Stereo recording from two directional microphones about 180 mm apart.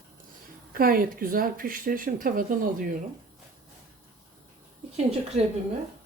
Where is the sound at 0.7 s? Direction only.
55° right (ahead or behind).